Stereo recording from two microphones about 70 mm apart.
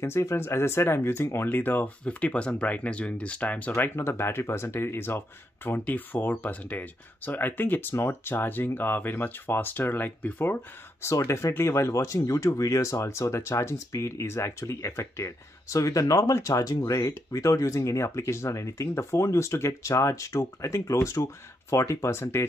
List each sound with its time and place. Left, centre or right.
0.0 s speech: left
3.7 s speech: left